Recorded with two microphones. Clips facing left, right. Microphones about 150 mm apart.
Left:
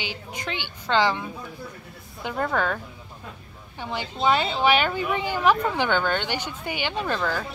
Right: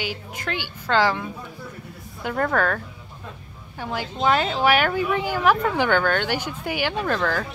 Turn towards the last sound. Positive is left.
turn(degrees=10)  # may be behind; listen again after turning